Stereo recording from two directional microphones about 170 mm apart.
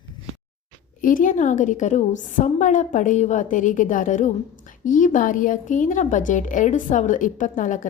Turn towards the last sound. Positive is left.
turn(degrees=50)  # may be behind; listen again after turning